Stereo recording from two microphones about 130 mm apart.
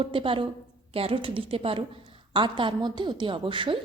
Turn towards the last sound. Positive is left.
turn(degrees=-40)  # may be behind; listen again after turning